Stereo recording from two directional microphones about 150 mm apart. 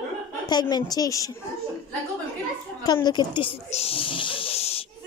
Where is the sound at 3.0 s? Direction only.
30° left (ahead or behind).